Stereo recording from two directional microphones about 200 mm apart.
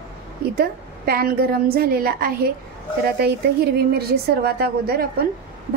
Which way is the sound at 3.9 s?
50° right (ahead or behind).